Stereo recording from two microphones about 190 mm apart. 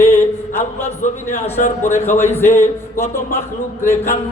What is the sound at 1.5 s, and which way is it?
Speech, 40° left (ahead or behind).